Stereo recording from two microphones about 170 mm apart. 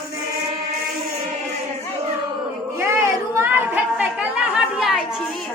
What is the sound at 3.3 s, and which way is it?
Chatter, 10° right (ahead or behind).